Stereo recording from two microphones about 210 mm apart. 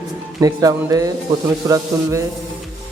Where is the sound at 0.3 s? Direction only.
15° right (ahead or behind).